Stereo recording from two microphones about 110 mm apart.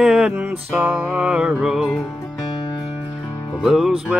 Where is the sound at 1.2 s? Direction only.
10° right (ahead or behind).